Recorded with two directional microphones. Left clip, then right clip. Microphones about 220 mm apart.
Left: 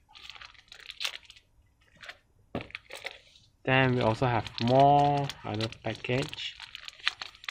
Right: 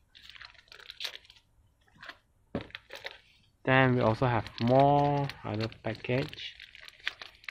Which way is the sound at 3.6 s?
20° right (ahead or behind).